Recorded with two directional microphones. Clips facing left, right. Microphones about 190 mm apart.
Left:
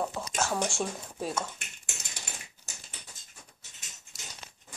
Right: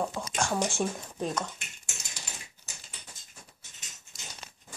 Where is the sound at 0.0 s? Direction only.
Centre (ahead or behind).